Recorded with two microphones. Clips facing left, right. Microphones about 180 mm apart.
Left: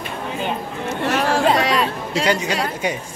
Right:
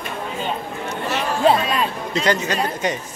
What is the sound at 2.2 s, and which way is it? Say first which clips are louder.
Speech: even; 10° left (ahead or behind).